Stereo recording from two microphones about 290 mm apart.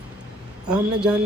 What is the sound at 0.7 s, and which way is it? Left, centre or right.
Speech, centre.